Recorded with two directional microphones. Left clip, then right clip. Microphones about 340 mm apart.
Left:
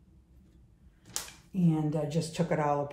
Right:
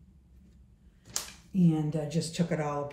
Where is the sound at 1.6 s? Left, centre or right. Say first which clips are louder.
Left 1 dB; centre.